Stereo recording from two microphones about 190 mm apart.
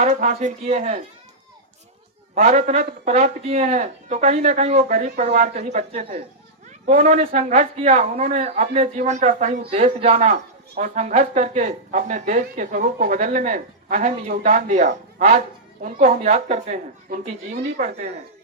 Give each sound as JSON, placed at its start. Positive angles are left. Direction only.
{"t": 0.0, "sound": "speech", "side_deg": -40}
{"t": 2.3, "sound": "speech", "side_deg": -35}